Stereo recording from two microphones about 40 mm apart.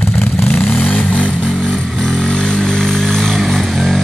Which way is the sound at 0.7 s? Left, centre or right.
Left.